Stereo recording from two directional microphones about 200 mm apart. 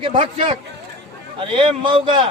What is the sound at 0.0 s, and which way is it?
A man's voice, 25° right (ahead or behind).